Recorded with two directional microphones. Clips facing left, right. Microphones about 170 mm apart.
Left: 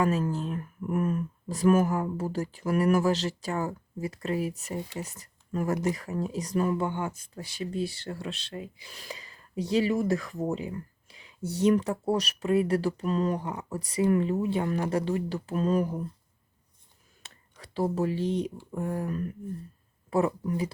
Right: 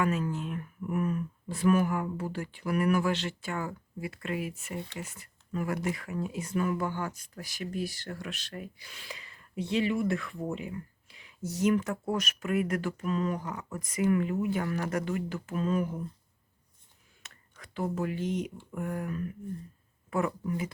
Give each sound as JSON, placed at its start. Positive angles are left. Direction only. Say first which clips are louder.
{"t": 0.0, "sound": "speech", "louder": "left 3 dB", "side_deg": 35}
{"t": 8.9, "sound": "speech", "louder": "left 4 dB", "side_deg": 35}
{"t": 17.2, "sound": "a sound", "louder": "left 2 dB", "side_deg": 30}
{"t": 17.6, "sound": "speech", "louder": "left 5 dB", "side_deg": 35}